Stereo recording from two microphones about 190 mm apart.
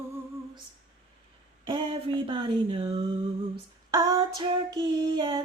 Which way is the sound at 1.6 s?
25° right (ahead or behind).